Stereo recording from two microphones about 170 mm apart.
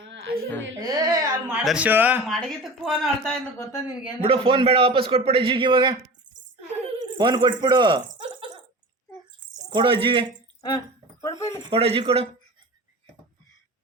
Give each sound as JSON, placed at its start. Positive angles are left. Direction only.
{"t": 0.0, "sound": "music", "side_deg": -90}
{"t": 0.8, "sound": "speech", "side_deg": -20}
{"t": 1.6, "sound": "speech", "side_deg": -5}
{"t": 2.2, "sound": "speech", "side_deg": 0}
{"t": 4.2, "sound": "a man's voice", "side_deg": -30}
{"t": 7.0, "sound": "a sound", "side_deg": -25}
{"t": 9.6, "sound": "speech", "side_deg": -30}
{"t": 10.6, "sound": "speech", "side_deg": 25}
{"t": 11.6, "sound": "a man's voice", "side_deg": -35}